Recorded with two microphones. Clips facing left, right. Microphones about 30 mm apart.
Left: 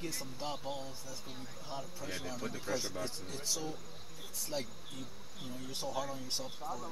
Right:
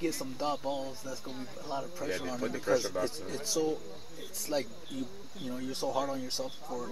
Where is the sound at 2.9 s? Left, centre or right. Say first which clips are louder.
Right 7 dB; right.